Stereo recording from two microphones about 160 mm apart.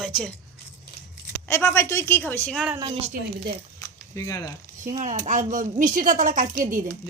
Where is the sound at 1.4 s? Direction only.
15° left (ahead or behind).